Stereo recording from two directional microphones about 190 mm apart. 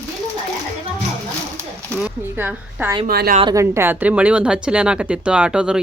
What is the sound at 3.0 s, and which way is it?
Speech, 50° right (ahead or behind).